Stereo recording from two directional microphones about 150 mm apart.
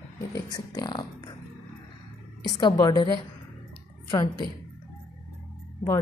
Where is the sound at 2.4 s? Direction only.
25° left (ahead or behind).